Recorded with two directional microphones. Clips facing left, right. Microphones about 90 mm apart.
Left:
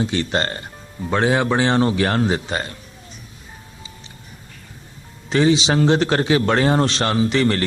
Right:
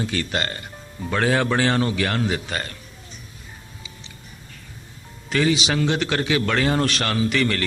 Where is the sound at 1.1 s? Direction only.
20° left (ahead or behind).